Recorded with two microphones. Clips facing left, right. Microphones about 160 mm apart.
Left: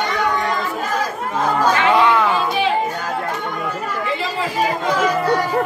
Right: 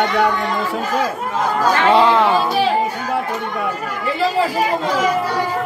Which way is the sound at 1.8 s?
30° right (ahead or behind).